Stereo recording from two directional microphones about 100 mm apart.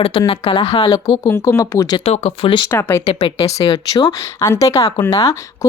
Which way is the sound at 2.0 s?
90° left.